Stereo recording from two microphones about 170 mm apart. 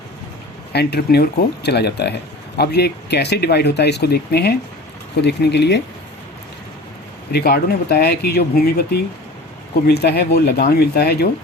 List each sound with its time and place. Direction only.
0.7 s speech: 75° left (ahead or behind)
7.3 s speech: 70° left (ahead or behind)